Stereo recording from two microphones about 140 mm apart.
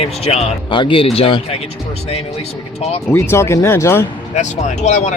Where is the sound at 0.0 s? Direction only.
45° left (ahead or behind).